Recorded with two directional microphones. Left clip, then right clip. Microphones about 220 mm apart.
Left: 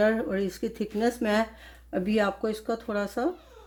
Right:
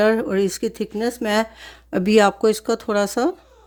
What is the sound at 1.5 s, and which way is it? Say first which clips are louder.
Speech: right 7 dB; 50° right (ahead or behind).